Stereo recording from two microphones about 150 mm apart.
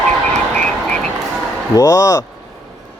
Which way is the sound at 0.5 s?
10° left (ahead or behind).